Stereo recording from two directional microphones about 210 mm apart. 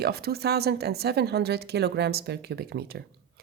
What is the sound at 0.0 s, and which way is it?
A woman's voice, 50° right (ahead or behind).